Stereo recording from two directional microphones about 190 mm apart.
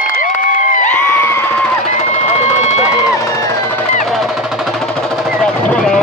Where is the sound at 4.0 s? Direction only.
Centre (ahead or behind).